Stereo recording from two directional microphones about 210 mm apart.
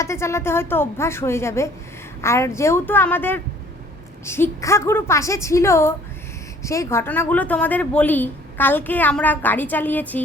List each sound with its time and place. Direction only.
0.0 s a woman's voice: 15° left (ahead or behind)